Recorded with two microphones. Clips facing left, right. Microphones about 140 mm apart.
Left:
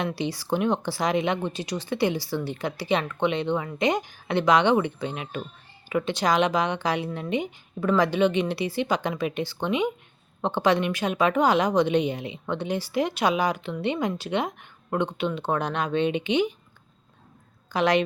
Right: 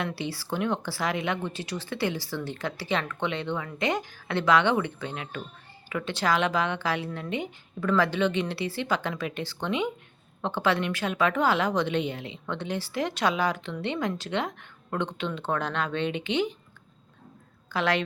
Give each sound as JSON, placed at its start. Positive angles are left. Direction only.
{"t": 0.0, "sound": "a woman's voice", "side_deg": 15}
{"t": 17.7, "sound": "a woman's voice", "side_deg": 15}